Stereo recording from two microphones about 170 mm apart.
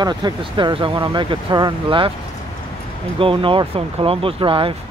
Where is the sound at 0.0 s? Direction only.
25° right (ahead or behind).